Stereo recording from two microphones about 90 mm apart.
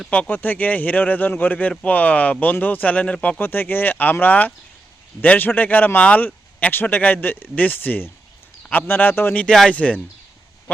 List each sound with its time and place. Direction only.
0.1 s speech: 20° left (ahead or behind)
9.5 s speech: 5° left (ahead or behind)